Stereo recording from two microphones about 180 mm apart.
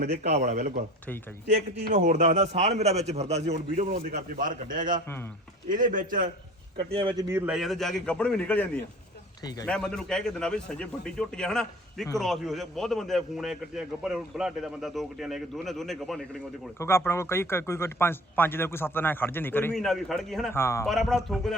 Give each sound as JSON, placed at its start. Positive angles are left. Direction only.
{"t": 0.4, "sound": "a man's voice", "side_deg": -45}
{"t": 1.9, "sound": "a man's voice", "side_deg": -45}
{"t": 4.1, "sound": "a man's voice", "side_deg": -50}
{"t": 6.9, "sound": "speech", "side_deg": -25}
{"t": 7.3, "sound": "a man's voice", "side_deg": -15}
{"t": 7.5, "sound": "a man's voice", "side_deg": 0}
{"t": 16.7, "sound": "speech", "side_deg": 15}
{"t": 20.5, "sound": "speech", "side_deg": 15}
{"t": 20.8, "sound": "a man's voice", "side_deg": 0}